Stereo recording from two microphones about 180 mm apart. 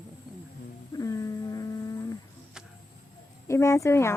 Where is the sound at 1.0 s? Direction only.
20° left (ahead or behind).